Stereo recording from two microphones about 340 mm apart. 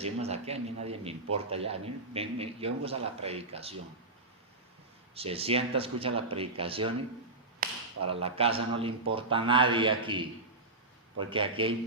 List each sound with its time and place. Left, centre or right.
0.0 s speech: centre
5.1 s speech: centre